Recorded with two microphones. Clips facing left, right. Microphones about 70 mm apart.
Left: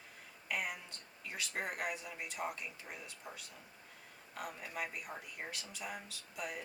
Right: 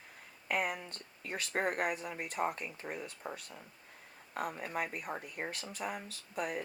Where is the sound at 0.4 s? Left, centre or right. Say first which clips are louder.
Right 6 dB; right.